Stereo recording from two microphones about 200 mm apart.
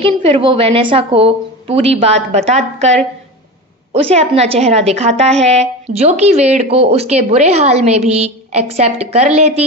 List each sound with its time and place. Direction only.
0.0 s a woman's voice: 30° right (ahead or behind)
4.1 s a woman's voice: 30° right (ahead or behind)